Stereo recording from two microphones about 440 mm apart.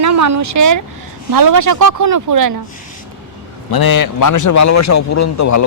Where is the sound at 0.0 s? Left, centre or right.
Right.